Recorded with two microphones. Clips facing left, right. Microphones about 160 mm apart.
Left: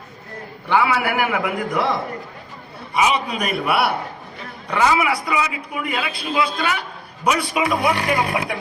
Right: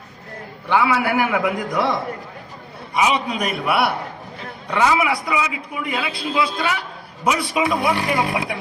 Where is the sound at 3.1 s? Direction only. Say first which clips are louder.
Even; 20° right (ahead or behind).